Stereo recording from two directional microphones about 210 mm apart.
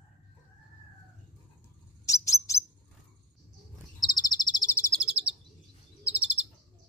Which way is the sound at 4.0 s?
20° left (ahead or behind).